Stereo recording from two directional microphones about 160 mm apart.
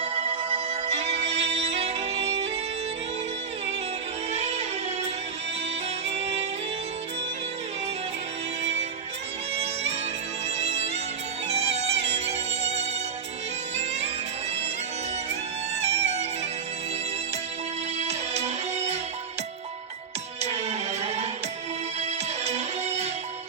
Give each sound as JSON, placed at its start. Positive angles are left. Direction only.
{"t": 0.0, "sound": "music", "side_deg": -40}
{"t": 4.3, "sound": "music", "side_deg": -40}
{"t": 6.1, "sound": "music", "side_deg": -40}
{"t": 8.6, "sound": "music", "side_deg": -45}
{"t": 10.6, "sound": "music", "side_deg": -45}
{"t": 15.8, "sound": "music", "side_deg": -40}
{"t": 18.0, "sound": "music", "side_deg": -45}
{"t": 20.4, "sound": "music", "side_deg": -40}